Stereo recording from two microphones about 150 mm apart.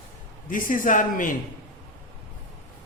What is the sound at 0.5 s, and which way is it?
Speech, 60° left (ahead or behind).